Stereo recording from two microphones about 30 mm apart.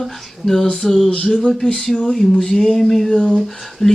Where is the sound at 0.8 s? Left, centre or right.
Centre.